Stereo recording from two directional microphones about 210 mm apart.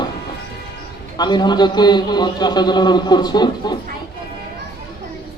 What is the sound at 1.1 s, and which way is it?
Speech, 20° left (ahead or behind).